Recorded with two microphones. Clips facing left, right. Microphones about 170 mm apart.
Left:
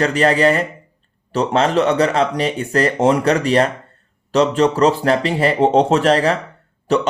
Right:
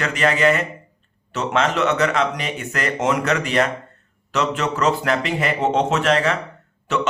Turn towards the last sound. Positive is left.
turn(degrees=35)  # may be behind; listen again after turning